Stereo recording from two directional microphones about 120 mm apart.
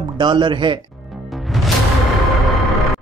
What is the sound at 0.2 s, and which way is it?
Speech, 40° right (ahead or behind).